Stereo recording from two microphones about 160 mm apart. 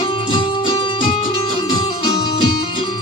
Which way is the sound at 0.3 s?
30° left (ahead or behind).